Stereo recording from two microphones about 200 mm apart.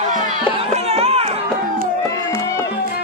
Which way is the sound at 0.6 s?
30° right (ahead or behind).